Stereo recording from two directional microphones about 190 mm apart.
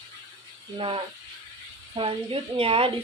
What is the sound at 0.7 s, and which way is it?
A woman's voice, 30° right (ahead or behind).